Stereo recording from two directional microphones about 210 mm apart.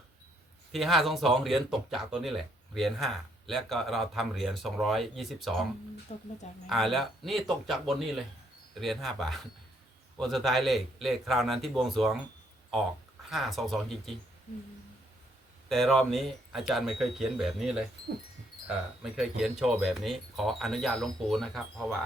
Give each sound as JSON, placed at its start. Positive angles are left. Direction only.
{"t": 0.7, "sound": "speech", "side_deg": 0}
{"t": 6.1, "sound": "speech", "side_deg": 30}
{"t": 6.7, "sound": "speech", "side_deg": 0}
{"t": 13.3, "sound": "speech", "side_deg": 0}
{"t": 15.7, "sound": "speech", "side_deg": 0}